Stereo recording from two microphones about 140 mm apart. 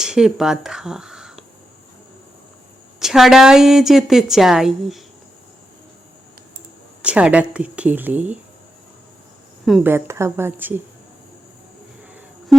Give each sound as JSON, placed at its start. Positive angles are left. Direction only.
{"t": 0.0, "sound": "speech", "side_deg": -5}
{"t": 3.0, "sound": "a woman's voice", "side_deg": -5}
{"t": 7.0, "sound": "speech", "side_deg": -10}
{"t": 9.8, "sound": "speech", "side_deg": -20}